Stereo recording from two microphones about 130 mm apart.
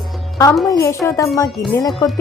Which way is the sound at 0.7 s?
20° left (ahead or behind).